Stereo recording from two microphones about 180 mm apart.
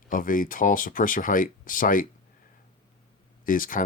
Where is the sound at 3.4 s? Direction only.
50° left (ahead or behind).